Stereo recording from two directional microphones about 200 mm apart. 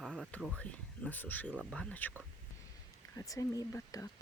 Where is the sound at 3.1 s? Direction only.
15° left (ahead or behind).